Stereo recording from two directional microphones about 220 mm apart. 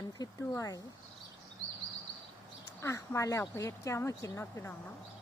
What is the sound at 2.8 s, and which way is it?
Speech, 10° left (ahead or behind).